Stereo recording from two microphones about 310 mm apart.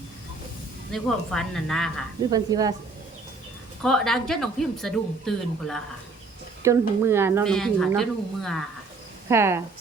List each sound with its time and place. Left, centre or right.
0.9 s a woman's voice: centre
2.3 s speech: centre
3.8 s a woman's voice: centre
6.6 s a woman's voice: centre